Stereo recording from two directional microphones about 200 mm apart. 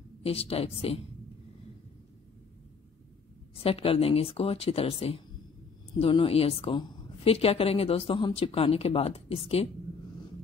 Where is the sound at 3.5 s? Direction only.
30° left (ahead or behind).